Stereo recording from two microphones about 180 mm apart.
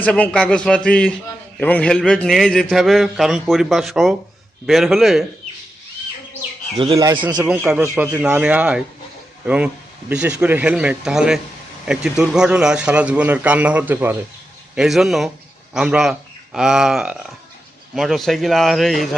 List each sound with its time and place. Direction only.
0.0 s a man's voice: 5° left (ahead or behind)
6.7 s speech: 30° right (ahead or behind)
7.3 s a man's voice: 5° right (ahead or behind)
10.1 s a man's voice: 5° right (ahead or behind)